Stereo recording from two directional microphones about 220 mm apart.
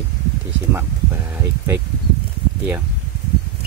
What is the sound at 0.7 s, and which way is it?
Speech, 10° right (ahead or behind).